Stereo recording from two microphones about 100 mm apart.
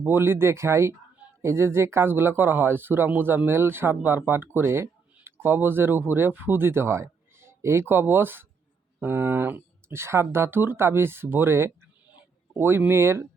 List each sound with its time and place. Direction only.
0.0 s speech: 25° right (ahead or behind)